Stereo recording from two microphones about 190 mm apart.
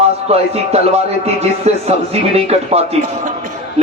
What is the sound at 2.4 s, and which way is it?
Speech, 35° right (ahead or behind).